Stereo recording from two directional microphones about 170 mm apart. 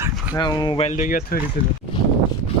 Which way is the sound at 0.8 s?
45° left (ahead or behind).